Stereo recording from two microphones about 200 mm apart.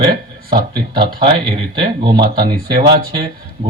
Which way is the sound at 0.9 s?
25° right (ahead or behind).